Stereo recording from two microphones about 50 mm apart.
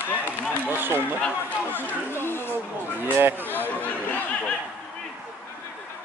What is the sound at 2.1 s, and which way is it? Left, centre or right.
Speech, left.